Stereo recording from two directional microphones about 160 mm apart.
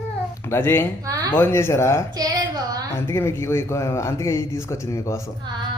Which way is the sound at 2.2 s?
20° right (ahead or behind).